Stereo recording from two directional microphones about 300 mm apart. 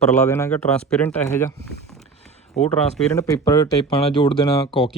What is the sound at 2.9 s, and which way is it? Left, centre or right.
Speech, centre.